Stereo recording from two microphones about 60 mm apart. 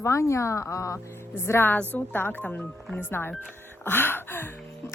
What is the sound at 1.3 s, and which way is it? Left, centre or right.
Speech, left.